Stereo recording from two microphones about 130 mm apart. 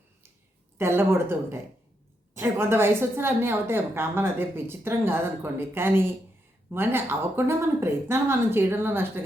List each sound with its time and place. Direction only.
0.8 s a woman's voice: 20° right (ahead or behind)